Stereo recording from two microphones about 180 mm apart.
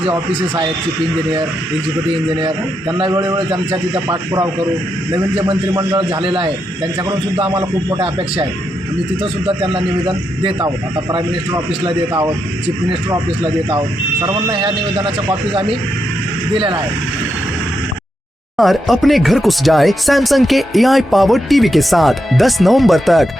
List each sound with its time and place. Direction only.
0.1 s a man's voice: 25° right (ahead or behind)
3.0 s a man's voice: 25° right (ahead or behind)
9.6 s a man's voice: 30° right (ahead or behind)
11.9 s a man's voice: 25° right (ahead or behind)
14.3 s a man's voice: 25° right (ahead or behind)
18.5 s speech: centre (ahead or behind)